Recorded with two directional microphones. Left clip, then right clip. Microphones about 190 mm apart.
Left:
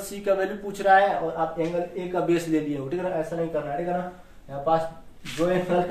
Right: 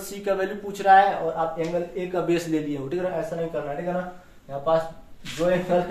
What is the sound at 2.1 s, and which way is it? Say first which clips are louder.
Speech: left 1 dB; centre (ahead or behind).